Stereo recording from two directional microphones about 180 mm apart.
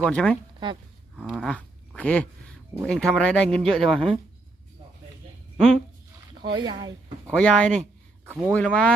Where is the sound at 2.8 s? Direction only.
5° left (ahead or behind).